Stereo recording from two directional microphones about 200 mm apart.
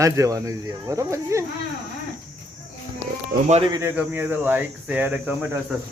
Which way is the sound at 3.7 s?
10° right (ahead or behind).